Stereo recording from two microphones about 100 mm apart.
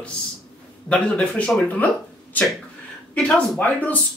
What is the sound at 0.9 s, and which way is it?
Speech, 10° left (ahead or behind).